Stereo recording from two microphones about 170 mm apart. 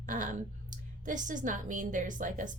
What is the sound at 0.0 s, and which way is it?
A woman's voice, 50° right (ahead or behind).